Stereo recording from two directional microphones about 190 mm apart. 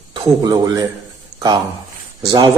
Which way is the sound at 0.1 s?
20° right (ahead or behind).